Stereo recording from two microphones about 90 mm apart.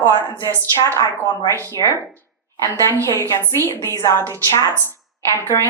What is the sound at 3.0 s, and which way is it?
A woman's voice, 30° left (ahead or behind).